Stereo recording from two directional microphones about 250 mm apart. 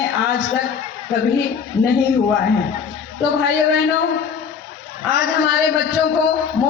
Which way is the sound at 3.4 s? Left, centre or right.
Left.